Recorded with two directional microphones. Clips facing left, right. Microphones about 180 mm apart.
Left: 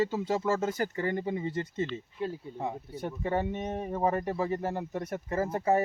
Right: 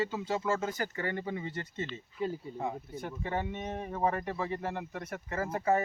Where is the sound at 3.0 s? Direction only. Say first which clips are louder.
Left 5 dB; 35° left (ahead or behind).